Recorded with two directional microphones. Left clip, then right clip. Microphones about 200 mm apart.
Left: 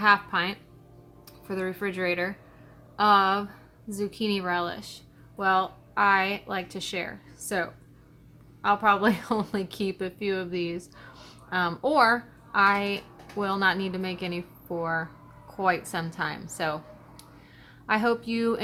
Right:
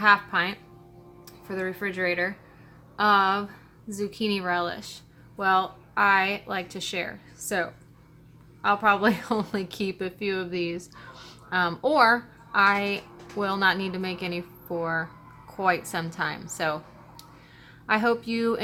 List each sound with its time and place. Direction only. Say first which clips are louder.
0.0 s a woman's voice: right 1 dB; 5° left (ahead or behind)